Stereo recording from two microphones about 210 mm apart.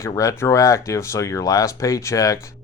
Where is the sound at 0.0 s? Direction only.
15° left (ahead or behind).